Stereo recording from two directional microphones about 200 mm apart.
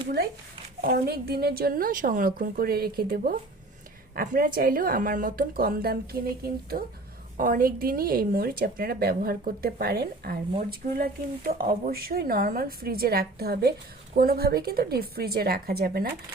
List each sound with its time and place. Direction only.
0.8 s a woman's voice: 50° right (ahead or behind)